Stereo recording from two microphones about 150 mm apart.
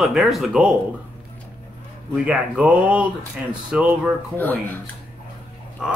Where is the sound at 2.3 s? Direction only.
10° right (ahead or behind).